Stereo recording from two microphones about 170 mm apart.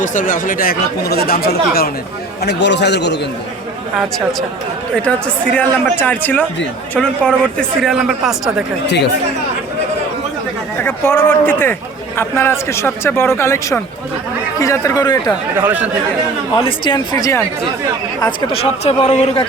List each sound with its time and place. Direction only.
0.0 s speech: 45° left (ahead or behind); by 1.9 s 65° left (ahead or behind)
2.4 s speech: 85° left
5.0 s a man's voice: 10° left (ahead or behind)
10.8 s a man's voice: 15° left (ahead or behind)
15.5 s speech: 10° right (ahead or behind)
16.6 s speech: 30° left (ahead or behind)